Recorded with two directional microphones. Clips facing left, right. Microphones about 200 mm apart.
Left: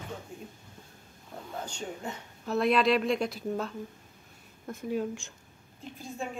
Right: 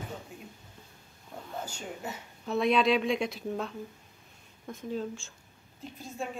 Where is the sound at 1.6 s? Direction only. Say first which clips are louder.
Left 2 dB; 5° right (ahead or behind); by 5.3 s 15° left (ahead or behind).